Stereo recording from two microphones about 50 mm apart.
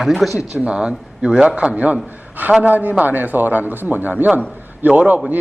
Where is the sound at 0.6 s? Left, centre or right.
Centre.